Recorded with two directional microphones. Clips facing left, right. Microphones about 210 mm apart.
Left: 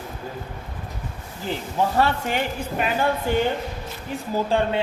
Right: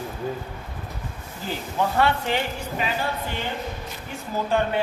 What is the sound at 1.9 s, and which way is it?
Speech, 40° left (ahead or behind).